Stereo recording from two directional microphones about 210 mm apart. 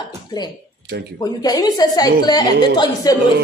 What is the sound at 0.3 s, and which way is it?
A woman's voice, 20° left (ahead or behind).